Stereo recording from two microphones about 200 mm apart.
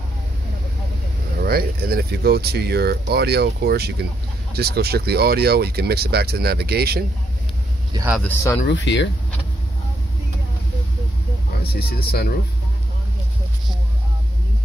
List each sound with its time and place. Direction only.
1.4 s speech: 50° right (ahead or behind)
8.2 s speech: 10° left (ahead or behind)
8.6 s speech: 60° left (ahead or behind)
11.6 s speech: 50° left (ahead or behind)